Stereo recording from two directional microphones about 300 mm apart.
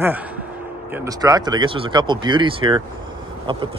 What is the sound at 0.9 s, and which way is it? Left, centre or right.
Speech, centre.